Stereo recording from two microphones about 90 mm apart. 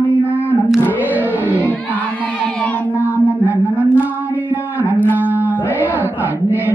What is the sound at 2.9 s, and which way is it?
Mantra, 20° right (ahead or behind).